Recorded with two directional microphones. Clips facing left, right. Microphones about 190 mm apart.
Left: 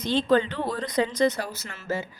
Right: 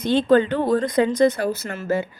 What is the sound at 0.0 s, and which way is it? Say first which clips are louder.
A woman's voice: right 5 dB; 55° right (ahead or behind).